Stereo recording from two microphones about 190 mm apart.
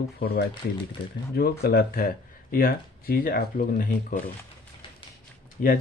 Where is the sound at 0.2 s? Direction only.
55° left (ahead or behind).